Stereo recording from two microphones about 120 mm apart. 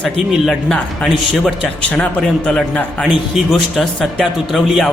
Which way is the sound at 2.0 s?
10° left (ahead or behind).